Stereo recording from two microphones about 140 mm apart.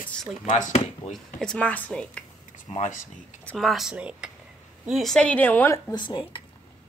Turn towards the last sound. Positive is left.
turn(degrees=35)  # may be behind; listen again after turning